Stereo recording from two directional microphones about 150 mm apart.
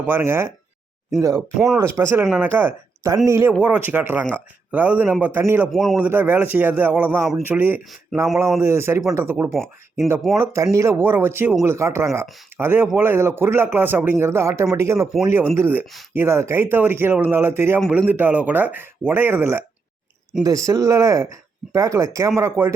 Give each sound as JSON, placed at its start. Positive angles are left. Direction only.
{"t": 0.0, "sound": "speech", "side_deg": -15}
{"t": 1.4, "sound": "speech", "side_deg": 0}
{"t": 1.8, "sound": "speech", "side_deg": -15}
{"t": 5.7, "sound": "speech", "side_deg": 0}
{"t": 6.0, "sound": "speech", "side_deg": -10}
{"t": 9.5, "sound": "speech", "side_deg": 0}
{"t": 10.3, "sound": "speech", "side_deg": -20}